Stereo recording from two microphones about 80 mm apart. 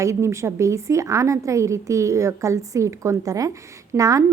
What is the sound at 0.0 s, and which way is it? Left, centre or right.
A woman's voice, right.